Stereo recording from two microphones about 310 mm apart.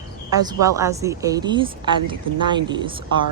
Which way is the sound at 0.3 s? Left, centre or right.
Centre.